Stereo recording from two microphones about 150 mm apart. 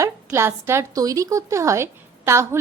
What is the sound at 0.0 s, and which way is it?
A woman's voice, 15° right (ahead or behind).